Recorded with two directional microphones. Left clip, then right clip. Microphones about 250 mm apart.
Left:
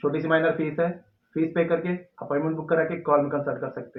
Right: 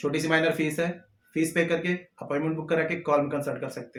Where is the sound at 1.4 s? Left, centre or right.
Right.